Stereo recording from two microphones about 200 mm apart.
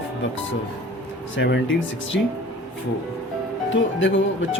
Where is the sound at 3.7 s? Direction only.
70° left (ahead or behind).